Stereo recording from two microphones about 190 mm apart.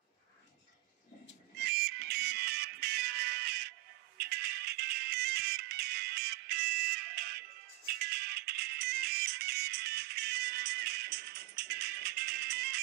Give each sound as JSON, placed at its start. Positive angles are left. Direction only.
{"t": 1.6, "sound": "music", "side_deg": -55}